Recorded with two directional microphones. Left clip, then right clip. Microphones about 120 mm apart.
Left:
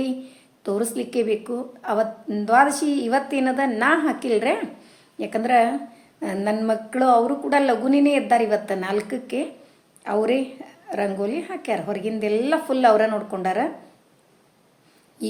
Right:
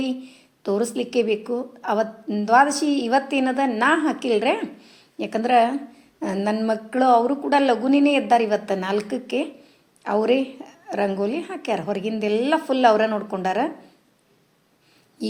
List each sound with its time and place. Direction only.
0.0 s a woman's voice: 25° right (ahead or behind)